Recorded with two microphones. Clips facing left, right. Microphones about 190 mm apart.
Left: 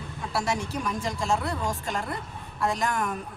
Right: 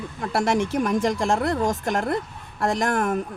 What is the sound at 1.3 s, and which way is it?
Speech, 75° right (ahead or behind).